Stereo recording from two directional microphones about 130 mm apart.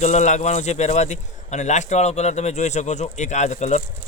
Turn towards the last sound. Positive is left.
turn(degrees=65)  # may be behind; listen again after turning